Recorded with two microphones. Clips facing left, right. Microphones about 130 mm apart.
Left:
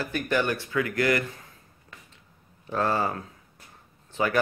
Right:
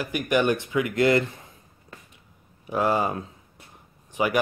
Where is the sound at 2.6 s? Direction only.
15° right (ahead or behind).